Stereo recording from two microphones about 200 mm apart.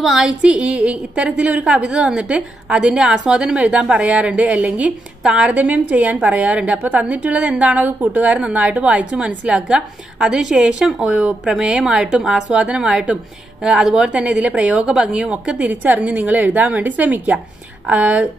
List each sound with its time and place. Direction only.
0.0 s a woman's voice: centre (ahead or behind)